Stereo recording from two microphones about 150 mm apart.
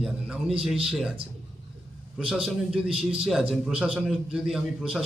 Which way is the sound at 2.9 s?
40° right (ahead or behind).